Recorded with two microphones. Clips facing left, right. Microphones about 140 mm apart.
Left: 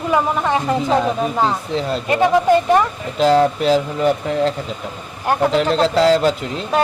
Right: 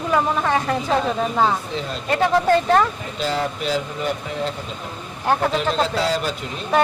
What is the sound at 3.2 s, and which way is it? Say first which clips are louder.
Speech: left 10 dB; 80° left.